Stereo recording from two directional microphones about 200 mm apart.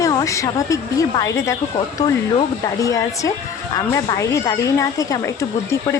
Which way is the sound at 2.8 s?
15° left (ahead or behind).